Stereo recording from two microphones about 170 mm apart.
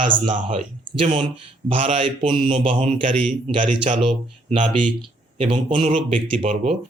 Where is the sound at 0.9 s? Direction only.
40° right (ahead or behind).